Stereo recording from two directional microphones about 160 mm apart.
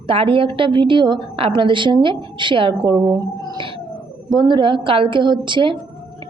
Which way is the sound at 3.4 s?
30° right (ahead or behind).